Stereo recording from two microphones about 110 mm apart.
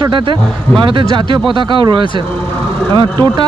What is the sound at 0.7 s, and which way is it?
A man's voice, 45° right (ahead or behind).